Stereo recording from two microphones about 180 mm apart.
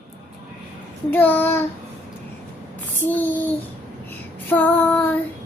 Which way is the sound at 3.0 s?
10° left (ahead or behind).